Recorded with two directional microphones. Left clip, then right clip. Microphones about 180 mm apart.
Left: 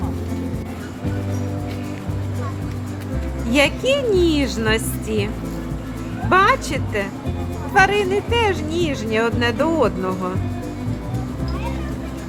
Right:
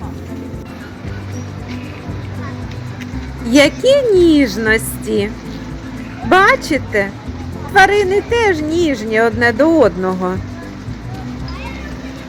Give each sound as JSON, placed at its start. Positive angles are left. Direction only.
{"t": 3.5, "sound": "speech", "side_deg": -10}